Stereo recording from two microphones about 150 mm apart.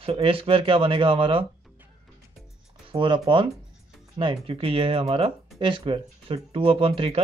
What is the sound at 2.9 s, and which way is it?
Speech, 35° right (ahead or behind).